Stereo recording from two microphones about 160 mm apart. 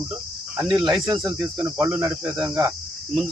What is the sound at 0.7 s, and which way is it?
Cricket, 30° right (ahead or behind).